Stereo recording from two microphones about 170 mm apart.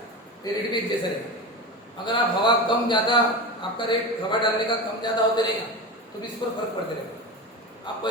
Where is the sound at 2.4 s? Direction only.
25° left (ahead or behind).